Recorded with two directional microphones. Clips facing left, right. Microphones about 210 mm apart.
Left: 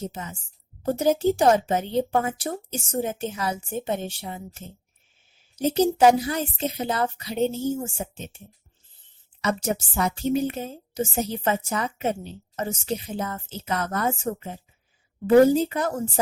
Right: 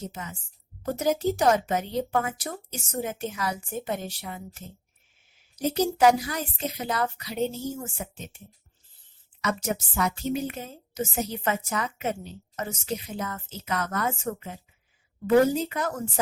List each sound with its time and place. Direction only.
0.0 s a woman's voice: 30° left (ahead or behind)
9.4 s a woman's voice: 30° left (ahead or behind)